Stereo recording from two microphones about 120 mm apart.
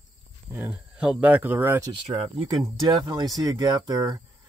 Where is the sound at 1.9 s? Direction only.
50° right (ahead or behind).